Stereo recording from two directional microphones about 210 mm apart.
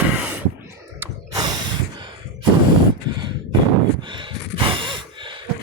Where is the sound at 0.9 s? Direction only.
20° right (ahead or behind).